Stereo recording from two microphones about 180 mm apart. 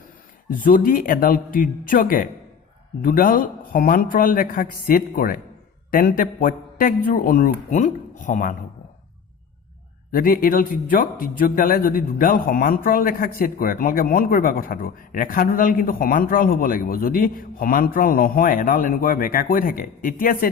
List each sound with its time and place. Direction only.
0.5 s a man's voice: 50° left (ahead or behind)
10.1 s a man's voice: 55° left (ahead or behind)